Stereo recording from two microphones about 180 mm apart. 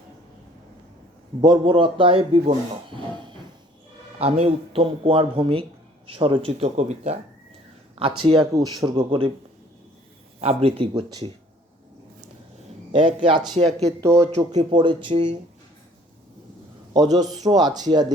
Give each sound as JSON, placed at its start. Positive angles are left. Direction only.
{"t": 1.4, "sound": "speech", "side_deg": -25}
{"t": 4.2, "sound": "speech", "side_deg": -35}
{"t": 10.4, "sound": "speech", "side_deg": -30}
{"t": 12.9, "sound": "a man's voice", "side_deg": -30}
{"t": 14.3, "sound": "speech", "side_deg": -35}
{"t": 16.9, "sound": "speech", "side_deg": -20}